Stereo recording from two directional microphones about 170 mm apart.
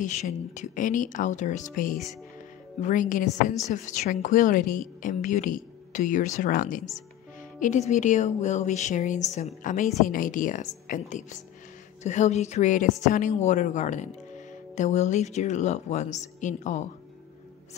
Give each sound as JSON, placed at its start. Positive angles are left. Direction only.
{"t": 0.0, "sound": "a woman's voice", "side_deg": 45}